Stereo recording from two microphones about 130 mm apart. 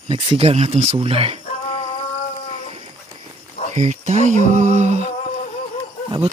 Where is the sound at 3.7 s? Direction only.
60° right (ahead or behind).